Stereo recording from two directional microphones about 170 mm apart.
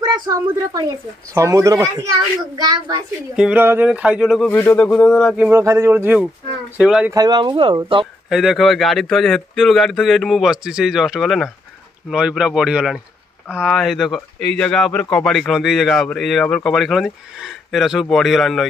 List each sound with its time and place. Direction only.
0.0 s speech: 25° right (ahead or behind)
1.3 s a sound: 20° right (ahead or behind)
2.5 s speech: 25° right (ahead or behind)
3.3 s a sound: 10° right (ahead or behind)
4.5 s speech: 10° left (ahead or behind)
5.4 s a sound: 15° right (ahead or behind)
6.8 s speech: 5° right (ahead or behind)
7.1 s speech: 20° right (ahead or behind)
8.3 s speech: centre (ahead or behind)